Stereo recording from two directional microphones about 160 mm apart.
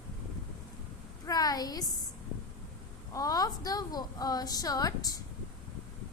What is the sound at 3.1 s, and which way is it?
A woman's voice, 25° left (ahead or behind).